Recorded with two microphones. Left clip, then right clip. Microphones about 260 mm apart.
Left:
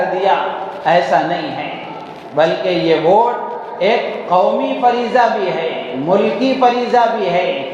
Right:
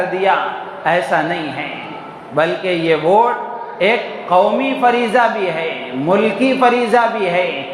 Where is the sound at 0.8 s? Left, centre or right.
Right.